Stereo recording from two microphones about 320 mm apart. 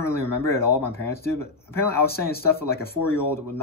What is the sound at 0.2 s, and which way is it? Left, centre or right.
Speech, centre.